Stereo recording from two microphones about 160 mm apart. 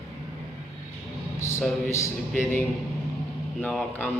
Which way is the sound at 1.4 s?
15° left (ahead or behind).